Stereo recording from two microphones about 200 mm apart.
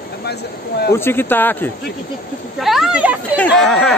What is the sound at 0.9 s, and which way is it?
Speech, 10° left (ahead or behind).